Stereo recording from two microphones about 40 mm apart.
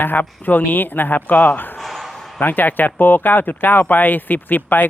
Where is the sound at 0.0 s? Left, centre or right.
Left.